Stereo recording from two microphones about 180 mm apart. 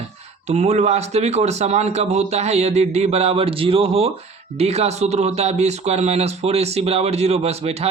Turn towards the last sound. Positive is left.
turn(degrees=-35)  # may be behind; listen again after turning